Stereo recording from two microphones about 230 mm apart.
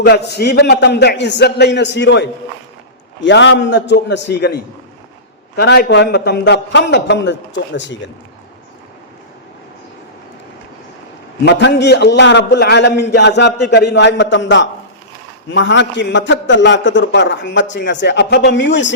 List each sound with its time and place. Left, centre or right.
0.0 s a man's voice: left
5.5 s a man's voice: left
11.4 s a man's voice: left